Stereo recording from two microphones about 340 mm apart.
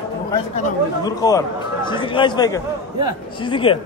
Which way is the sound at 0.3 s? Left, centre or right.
Centre.